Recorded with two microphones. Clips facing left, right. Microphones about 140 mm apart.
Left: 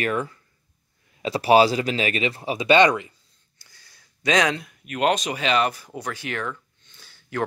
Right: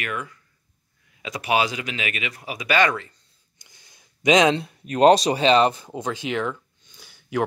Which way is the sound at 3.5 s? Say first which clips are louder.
Right 1 dB; 20° right (ahead or behind).